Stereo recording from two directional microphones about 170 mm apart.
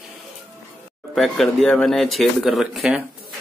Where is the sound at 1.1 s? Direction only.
Centre (ahead or behind).